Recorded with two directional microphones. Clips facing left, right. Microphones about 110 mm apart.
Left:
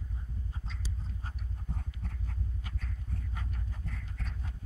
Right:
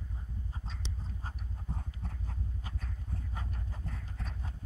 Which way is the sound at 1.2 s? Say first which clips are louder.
Even; 30° right (ahead or behind).